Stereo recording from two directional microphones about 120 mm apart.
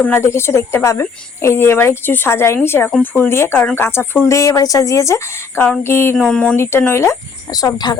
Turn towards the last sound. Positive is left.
turn(degrees=35)  # may be behind; listen again after turning